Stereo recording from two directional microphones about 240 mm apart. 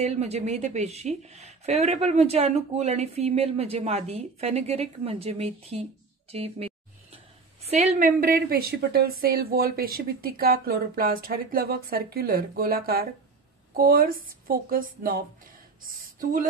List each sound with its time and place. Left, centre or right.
0.0 s speech: right
6.3 s a sound: right
7.6 s a woman's voice: right